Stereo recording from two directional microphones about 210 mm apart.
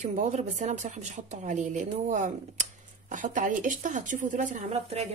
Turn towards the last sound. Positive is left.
turn(degrees=-30)  # may be behind; listen again after turning